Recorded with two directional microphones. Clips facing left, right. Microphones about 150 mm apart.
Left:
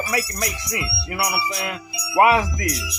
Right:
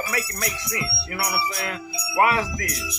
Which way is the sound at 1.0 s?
15° left (ahead or behind).